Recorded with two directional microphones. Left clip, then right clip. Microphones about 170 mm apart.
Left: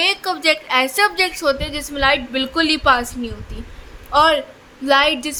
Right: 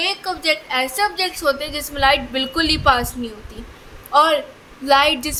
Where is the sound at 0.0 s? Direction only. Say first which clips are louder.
Left 4 dB; 30° left (ahead or behind).